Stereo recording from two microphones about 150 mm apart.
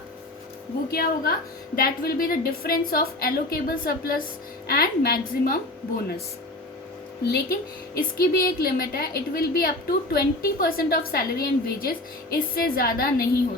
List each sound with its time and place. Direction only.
0.9 s a woman's voice: 90° left
7.3 s a woman's voice: 90° left